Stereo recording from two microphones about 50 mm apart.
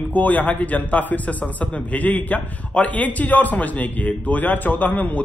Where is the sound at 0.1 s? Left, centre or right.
Left.